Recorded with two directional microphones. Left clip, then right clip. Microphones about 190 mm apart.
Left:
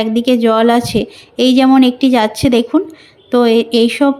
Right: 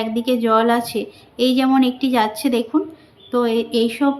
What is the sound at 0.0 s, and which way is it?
A woman's voice, 40° left (ahead or behind).